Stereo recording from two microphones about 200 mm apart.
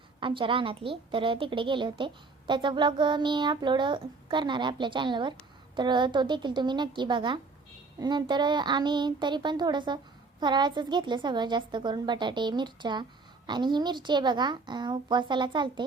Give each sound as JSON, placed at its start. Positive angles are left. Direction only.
{"t": 0.2, "sound": "a child's voice", "side_deg": -25}